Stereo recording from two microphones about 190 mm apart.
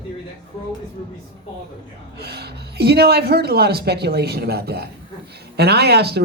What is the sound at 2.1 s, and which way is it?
A woman's voice, 55° right (ahead or behind).